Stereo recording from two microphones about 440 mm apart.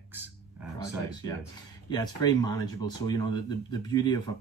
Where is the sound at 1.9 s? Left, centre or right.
Centre.